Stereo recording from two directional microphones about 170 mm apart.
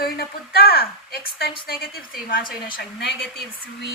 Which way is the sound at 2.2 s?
55° left (ahead or behind).